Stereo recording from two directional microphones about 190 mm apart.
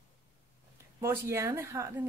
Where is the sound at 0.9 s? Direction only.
15° right (ahead or behind).